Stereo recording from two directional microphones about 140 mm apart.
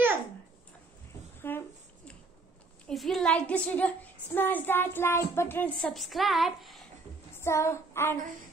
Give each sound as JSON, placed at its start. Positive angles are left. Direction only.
{"t": 1.4, "sound": "a sound", "side_deg": 15}
{"t": 2.9, "sound": "a woman's voice", "side_deg": 0}
{"t": 7.3, "sound": "child singing", "side_deg": 20}